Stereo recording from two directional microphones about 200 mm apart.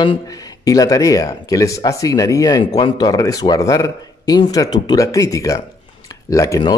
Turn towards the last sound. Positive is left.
turn(degrees=20)  # may be behind; listen again after turning